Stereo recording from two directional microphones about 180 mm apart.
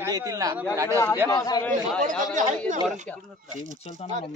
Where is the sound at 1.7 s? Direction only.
45° right (ahead or behind).